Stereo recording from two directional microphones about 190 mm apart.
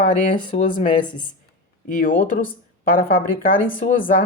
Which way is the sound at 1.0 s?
25° left (ahead or behind).